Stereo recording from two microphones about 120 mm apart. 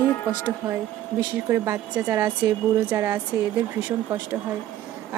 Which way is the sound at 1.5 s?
20° right (ahead or behind).